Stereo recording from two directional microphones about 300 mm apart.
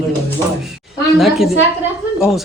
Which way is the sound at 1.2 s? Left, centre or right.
Centre.